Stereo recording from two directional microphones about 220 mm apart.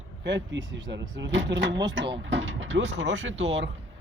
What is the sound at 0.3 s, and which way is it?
Speech, 55° right (ahead or behind).